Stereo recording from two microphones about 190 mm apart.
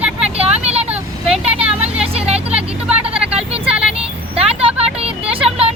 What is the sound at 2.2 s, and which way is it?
Vehicle, 35° right (ahead or behind).